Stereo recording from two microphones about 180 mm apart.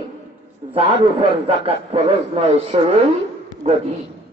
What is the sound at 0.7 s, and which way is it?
A man's voice, 30° right (ahead or behind).